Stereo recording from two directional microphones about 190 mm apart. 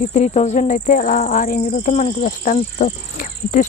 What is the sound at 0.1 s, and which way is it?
Speech, 35° left (ahead or behind).